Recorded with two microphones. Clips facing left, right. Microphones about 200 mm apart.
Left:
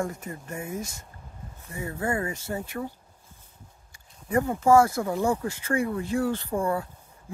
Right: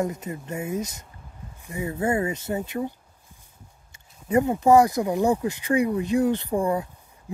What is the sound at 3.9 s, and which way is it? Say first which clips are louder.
Speech: right 4 dB; 20° right (ahead or behind).